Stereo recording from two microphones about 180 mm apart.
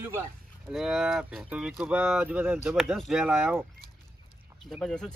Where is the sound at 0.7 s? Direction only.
Centre (ahead or behind).